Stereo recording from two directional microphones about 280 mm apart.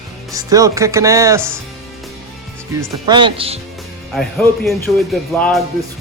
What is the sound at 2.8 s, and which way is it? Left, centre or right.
Speech, centre.